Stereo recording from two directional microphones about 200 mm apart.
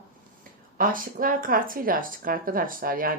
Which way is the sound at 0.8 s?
45° right (ahead or behind).